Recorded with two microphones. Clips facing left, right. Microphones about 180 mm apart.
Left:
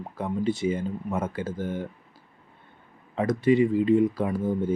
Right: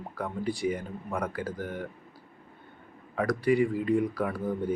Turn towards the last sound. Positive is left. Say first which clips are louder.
# left 4 dB
turn(degrees=25)  # may be behind; listen again after turning